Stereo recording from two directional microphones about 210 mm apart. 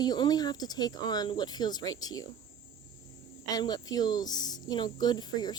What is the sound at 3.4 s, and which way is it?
Speech, 20° left (ahead or behind).